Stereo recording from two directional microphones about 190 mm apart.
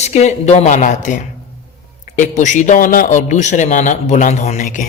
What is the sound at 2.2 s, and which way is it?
A man's voice, 40° left (ahead or behind).